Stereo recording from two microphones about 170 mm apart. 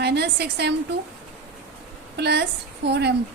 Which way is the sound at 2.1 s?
80° right.